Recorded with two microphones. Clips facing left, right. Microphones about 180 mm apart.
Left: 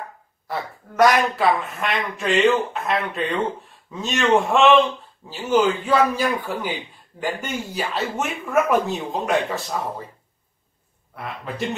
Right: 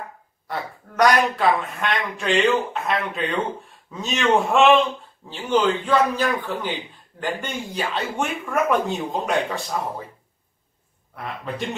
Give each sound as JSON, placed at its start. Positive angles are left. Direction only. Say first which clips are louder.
{"t": 0.5, "sound": "a man's voice", "louder": "left 1 dB", "side_deg": 0}
{"t": 11.1, "sound": "a man's voice", "louder": "right 1 dB", "side_deg": 0}